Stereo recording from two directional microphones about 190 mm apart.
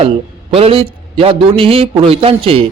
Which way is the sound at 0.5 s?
30° right (ahead or behind).